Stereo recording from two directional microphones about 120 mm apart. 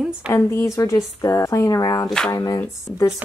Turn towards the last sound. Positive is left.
turn(degrees=10)  # may be behind; listen again after turning